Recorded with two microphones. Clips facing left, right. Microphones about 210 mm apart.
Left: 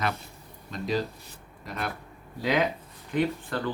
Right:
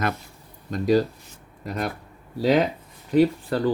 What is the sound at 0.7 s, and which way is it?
Speech, 45° right (ahead or behind).